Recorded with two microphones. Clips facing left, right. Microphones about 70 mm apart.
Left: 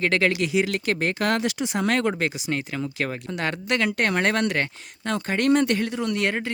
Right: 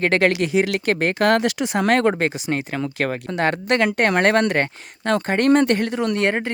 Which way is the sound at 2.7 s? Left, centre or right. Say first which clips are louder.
Right 5 dB; right.